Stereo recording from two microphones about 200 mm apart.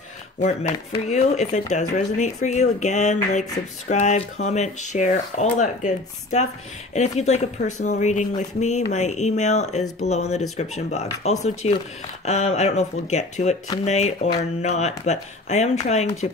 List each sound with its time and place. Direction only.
0.4 s speech: 35° left (ahead or behind)